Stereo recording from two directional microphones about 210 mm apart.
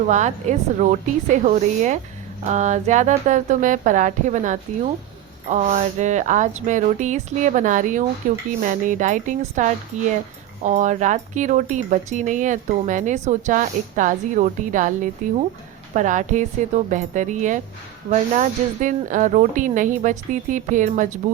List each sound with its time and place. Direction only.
0.1 s speech: 35° right (ahead or behind)